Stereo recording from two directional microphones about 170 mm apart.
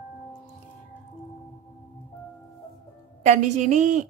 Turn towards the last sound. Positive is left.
turn(degrees=-45)  # may be behind; listen again after turning